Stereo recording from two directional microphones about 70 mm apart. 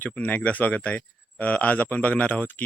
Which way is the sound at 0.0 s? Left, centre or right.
Left.